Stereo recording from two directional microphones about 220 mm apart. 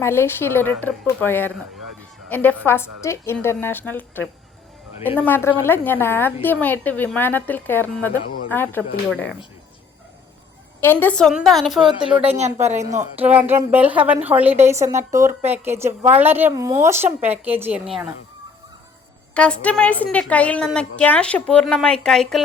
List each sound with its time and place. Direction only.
0.0 s a woman's voice: 10° left (ahead or behind)
5.2 s a woman's voice: 10° left (ahead or behind)
10.8 s a woman's voice: 10° left (ahead or behind)
12.3 s speech: 30° right (ahead or behind)
13.0 s a woman's voice: 10° right (ahead or behind)
19.3 s a woman's voice: 5° left (ahead or behind)